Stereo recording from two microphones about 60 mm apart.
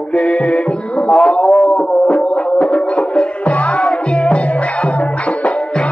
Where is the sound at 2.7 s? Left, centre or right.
Centre.